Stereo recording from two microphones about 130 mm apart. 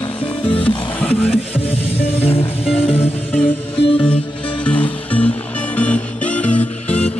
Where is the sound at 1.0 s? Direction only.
10° left (ahead or behind).